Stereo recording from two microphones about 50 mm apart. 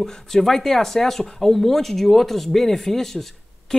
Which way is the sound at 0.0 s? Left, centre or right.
Centre.